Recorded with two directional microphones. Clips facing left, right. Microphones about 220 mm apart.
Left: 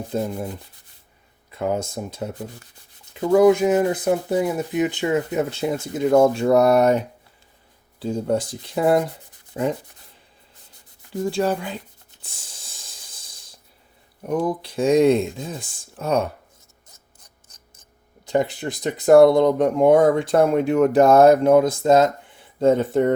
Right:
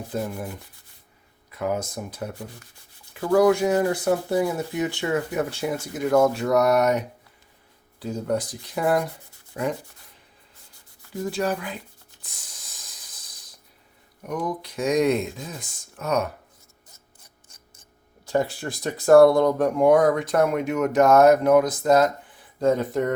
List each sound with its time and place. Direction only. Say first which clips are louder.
0.1 s speech: left 4 dB; 25° left (ahead or behind)
11.2 s speech: left 4 dB; 30° left (ahead or behind)
12.2 s spray: left 3 dB; 30° left (ahead or behind)
14.2 s speech: left 6 dB; 30° left (ahead or behind)
18.3 s speech: left 3 dB; 20° left (ahead or behind)